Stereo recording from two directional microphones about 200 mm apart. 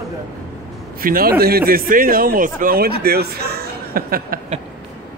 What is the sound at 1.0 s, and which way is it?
A man's voice, 45° right (ahead or behind).